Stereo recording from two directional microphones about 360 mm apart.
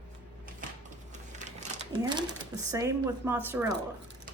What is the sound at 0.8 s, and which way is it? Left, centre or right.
Typewriter, centre.